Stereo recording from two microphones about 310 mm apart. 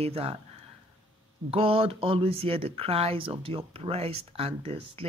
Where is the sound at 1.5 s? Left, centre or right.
Centre.